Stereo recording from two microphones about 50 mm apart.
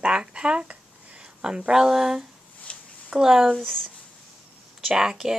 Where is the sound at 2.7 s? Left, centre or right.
Left.